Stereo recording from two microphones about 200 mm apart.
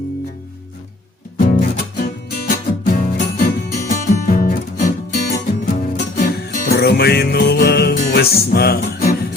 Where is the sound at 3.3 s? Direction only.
40° left (ahead or behind).